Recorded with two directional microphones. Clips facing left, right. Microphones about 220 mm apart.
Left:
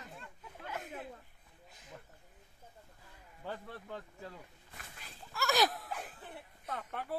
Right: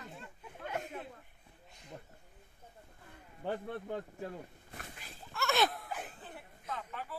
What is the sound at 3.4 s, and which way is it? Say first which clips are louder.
Speech: right 7 dB; 55° right (ahead or behind).